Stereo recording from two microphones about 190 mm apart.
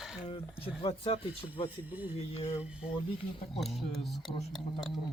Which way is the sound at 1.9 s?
10° right (ahead or behind).